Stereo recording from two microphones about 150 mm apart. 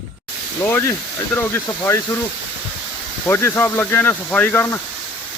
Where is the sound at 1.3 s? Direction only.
15° left (ahead or behind).